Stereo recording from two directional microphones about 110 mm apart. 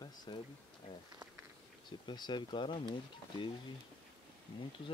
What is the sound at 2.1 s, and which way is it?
Speech, 45° left (ahead or behind).